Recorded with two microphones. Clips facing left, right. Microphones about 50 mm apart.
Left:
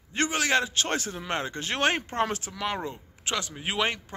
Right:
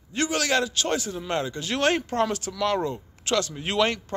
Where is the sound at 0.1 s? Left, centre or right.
Left.